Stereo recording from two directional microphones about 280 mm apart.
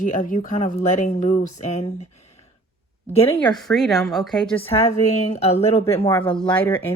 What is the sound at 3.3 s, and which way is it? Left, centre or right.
A woman's voice, centre.